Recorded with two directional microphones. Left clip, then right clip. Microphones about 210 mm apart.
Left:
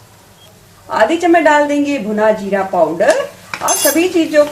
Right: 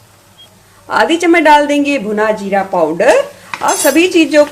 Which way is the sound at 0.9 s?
40° right (ahead or behind).